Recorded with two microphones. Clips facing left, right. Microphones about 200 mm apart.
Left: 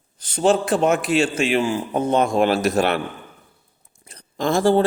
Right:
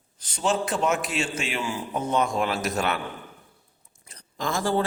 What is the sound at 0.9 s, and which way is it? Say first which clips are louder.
Speech: left 8 dB; 60° left (ahead or behind).